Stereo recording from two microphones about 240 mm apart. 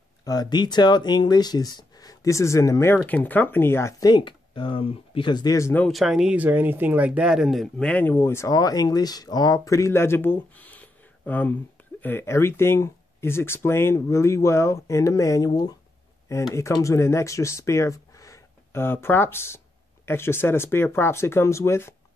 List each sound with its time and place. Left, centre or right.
0.2 s speech: centre